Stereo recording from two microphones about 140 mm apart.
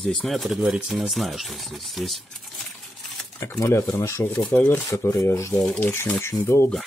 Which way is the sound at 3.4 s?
20° left (ahead or behind).